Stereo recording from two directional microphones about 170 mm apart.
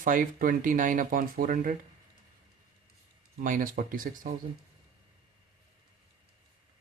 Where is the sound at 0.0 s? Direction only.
50° right (ahead or behind).